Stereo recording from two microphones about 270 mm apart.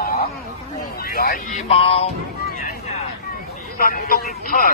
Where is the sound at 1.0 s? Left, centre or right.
Left.